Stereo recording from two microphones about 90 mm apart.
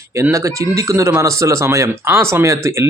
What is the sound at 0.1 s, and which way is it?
Speech, 30° right (ahead or behind).